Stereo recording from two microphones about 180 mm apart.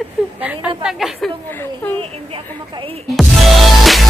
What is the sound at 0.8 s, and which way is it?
Speech, centre (ahead or behind).